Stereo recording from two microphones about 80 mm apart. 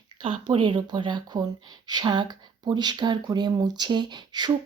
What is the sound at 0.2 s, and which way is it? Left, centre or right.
Speech, right.